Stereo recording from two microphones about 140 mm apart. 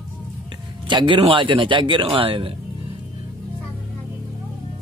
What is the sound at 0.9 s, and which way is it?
A man's voice, 35° right (ahead or behind).